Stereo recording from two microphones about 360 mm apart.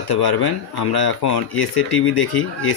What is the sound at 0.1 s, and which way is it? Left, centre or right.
Speech, left.